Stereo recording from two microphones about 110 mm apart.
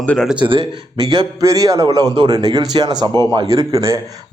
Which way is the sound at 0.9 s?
45° right (ahead or behind).